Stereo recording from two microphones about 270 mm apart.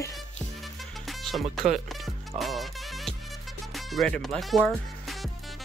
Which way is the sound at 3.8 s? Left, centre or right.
Centre.